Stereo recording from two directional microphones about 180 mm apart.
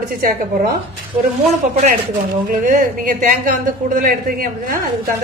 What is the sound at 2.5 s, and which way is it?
A woman's voice, 50° right (ahead or behind).